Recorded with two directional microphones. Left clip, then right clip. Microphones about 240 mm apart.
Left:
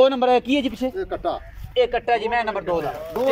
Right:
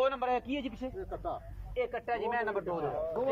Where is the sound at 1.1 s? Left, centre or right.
Left.